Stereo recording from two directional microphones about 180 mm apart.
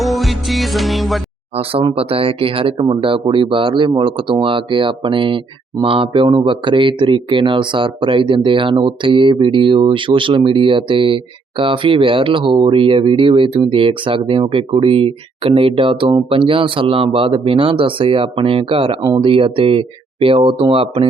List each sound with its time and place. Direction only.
0.0 s music: centre (ahead or behind)
1.5 s speech: 30° right (ahead or behind)